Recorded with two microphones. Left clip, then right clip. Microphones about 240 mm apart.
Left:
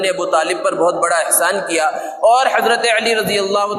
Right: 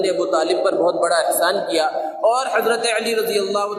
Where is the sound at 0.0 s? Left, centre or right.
Left.